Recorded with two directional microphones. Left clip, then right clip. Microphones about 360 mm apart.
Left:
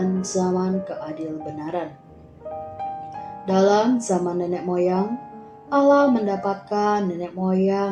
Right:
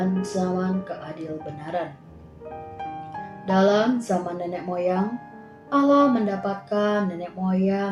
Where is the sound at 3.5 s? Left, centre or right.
Left.